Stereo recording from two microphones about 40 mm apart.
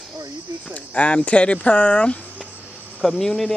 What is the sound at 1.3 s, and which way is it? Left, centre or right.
Speech, left.